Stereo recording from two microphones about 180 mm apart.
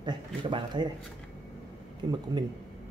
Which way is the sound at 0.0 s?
25° right (ahead or behind).